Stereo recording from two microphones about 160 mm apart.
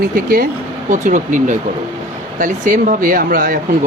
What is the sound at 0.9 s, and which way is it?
Speech, 50° right (ahead or behind).